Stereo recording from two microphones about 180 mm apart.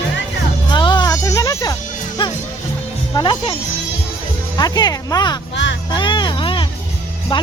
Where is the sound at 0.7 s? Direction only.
25° left (ahead or behind).